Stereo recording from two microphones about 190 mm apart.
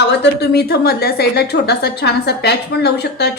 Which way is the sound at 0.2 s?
60° left (ahead or behind).